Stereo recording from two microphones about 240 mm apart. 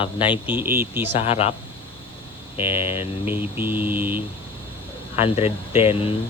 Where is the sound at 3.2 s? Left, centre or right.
Centre.